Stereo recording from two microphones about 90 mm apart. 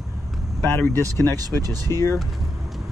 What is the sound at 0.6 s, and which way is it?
Speech, 20° left (ahead or behind).